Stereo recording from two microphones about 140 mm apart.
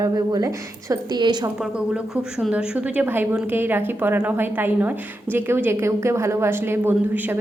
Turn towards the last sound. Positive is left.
turn(degrees=-15)  # may be behind; listen again after turning